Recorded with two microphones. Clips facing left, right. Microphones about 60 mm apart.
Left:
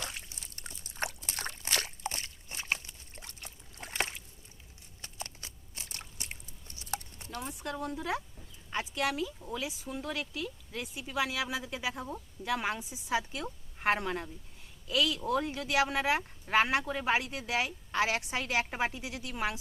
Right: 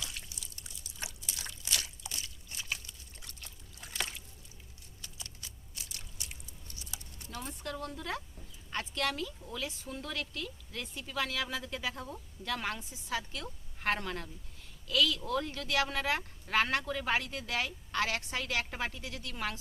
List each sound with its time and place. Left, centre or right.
0.1 s a sound: left
5.0 s biting: left
7.4 s speech: centre